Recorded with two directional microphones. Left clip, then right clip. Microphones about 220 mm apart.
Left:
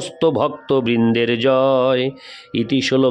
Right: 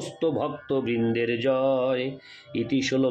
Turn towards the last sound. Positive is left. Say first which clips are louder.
# left 8 dB
turn(degrees=50)  # may be behind; listen again after turning